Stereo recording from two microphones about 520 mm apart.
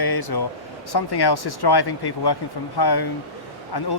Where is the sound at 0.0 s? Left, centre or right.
Left.